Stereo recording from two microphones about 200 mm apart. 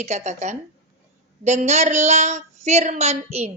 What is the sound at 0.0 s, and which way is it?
A woman's voice, 35° right (ahead or behind).